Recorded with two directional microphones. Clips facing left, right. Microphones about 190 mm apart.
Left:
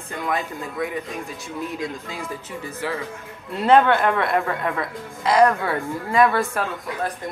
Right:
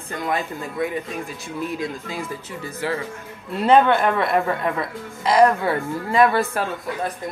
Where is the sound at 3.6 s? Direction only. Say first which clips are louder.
Even; 15° right (ahead or behind).